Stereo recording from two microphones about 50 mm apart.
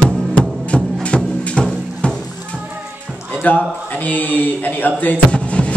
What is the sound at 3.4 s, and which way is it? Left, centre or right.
A man's voice, left.